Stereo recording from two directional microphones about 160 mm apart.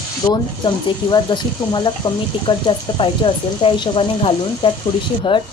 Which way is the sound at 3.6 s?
35° left (ahead or behind).